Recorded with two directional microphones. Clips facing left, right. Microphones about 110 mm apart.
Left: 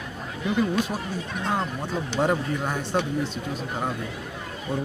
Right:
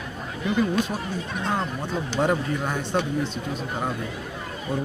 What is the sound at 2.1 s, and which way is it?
Speech, 5° left (ahead or behind).